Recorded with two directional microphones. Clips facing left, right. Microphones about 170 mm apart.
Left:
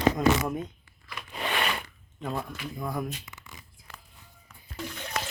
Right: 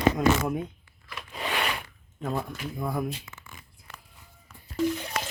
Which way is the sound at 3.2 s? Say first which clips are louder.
Right 1 dB; 20° left (ahead or behind).